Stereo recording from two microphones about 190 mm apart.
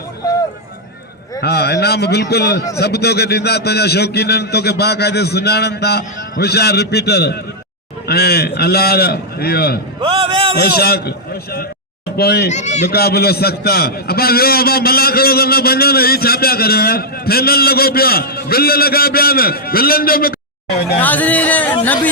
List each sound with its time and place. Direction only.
1.4 s a man's voice: 60° left (ahead or behind)
10.0 s a man's voice: 30° right (ahead or behind)
10.6 s a man's voice: 55° left (ahead or behind)
12.1 s a man's voice: 55° left (ahead or behind)
12.5 s speech: 35° left (ahead or behind)
12.9 s a man's voice: 55° left (ahead or behind)
21.0 s speech: 10° left (ahead or behind)